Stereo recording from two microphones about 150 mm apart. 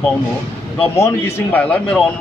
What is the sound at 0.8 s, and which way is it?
Speech, 20° left (ahead or behind).